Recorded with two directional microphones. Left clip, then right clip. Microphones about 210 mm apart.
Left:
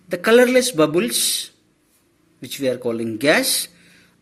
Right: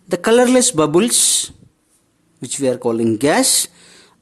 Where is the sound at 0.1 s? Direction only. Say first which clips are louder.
Right 1 dB; 30° right (ahead or behind).